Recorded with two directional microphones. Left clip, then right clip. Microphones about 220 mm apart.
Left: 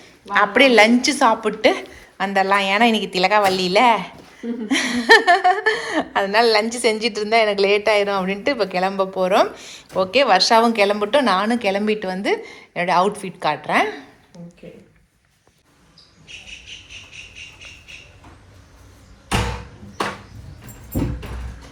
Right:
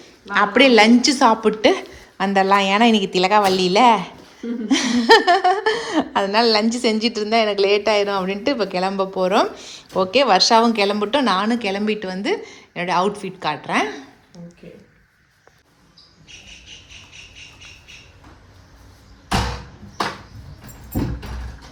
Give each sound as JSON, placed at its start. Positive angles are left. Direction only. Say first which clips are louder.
{"t": 0.0, "sound": "a woman's voice", "louder": "left 1 dB", "side_deg": -15}
{"t": 16.6, "sound": "squeal", "louder": "left 3 dB", "side_deg": -45}